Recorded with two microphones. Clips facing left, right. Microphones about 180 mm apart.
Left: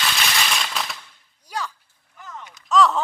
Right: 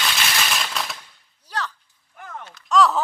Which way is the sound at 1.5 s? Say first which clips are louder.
Even; 10° left (ahead or behind).